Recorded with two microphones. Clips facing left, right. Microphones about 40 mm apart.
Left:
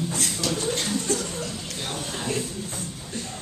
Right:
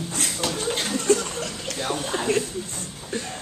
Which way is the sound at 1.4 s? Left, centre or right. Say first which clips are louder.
Right 3 dB; right.